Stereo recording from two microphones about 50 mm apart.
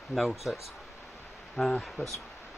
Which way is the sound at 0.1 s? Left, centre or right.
Centre.